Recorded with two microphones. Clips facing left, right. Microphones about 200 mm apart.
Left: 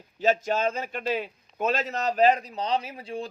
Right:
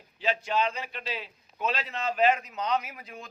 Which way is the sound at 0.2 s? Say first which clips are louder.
Left 4 dB; 45° left (ahead or behind).